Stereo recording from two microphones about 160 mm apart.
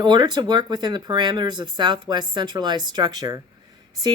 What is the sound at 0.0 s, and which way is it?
Speech, 25° right (ahead or behind).